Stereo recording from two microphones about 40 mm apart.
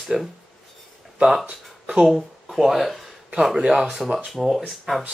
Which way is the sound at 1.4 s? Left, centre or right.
Right.